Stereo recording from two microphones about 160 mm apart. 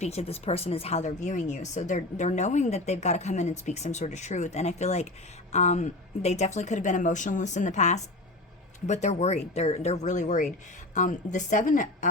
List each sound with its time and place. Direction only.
0.0 s a woman's voice: 40° left (ahead or behind)